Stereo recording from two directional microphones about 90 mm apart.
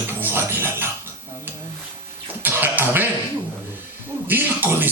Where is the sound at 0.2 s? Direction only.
25° right (ahead or behind).